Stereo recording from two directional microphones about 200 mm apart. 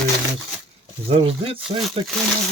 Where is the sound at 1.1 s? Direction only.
30° right (ahead or behind).